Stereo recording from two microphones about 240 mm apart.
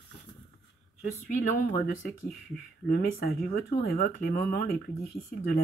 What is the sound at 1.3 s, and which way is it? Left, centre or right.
Speech, left.